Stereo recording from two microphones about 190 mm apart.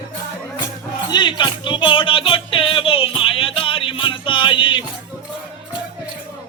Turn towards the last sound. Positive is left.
turn(degrees=25)  # may be behind; listen again after turning